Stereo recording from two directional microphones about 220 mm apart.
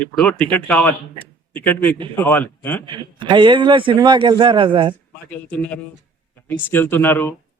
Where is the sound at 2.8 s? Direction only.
20° right (ahead or behind).